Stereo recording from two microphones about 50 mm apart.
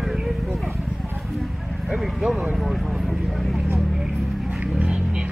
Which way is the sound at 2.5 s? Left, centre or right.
Centre.